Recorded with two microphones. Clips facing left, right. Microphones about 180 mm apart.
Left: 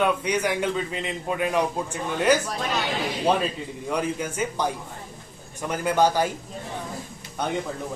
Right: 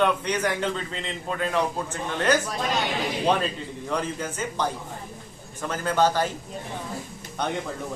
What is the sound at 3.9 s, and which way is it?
A man's voice, 10° left (ahead or behind).